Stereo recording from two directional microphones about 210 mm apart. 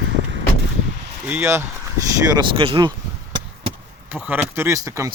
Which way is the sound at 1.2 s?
10° right (ahead or behind).